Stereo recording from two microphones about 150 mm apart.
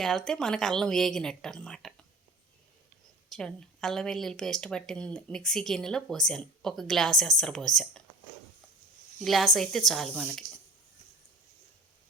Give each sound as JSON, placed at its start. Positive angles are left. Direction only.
{"t": 0.0, "sound": "speech", "side_deg": 0}
{"t": 3.2, "sound": "speech", "side_deg": 5}
{"t": 9.2, "sound": "speech", "side_deg": 0}